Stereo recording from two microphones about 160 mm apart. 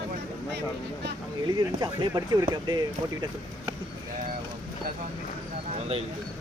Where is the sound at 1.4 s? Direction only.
25° right (ahead or behind).